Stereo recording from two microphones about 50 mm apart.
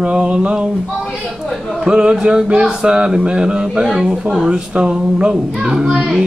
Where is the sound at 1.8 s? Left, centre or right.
Centre.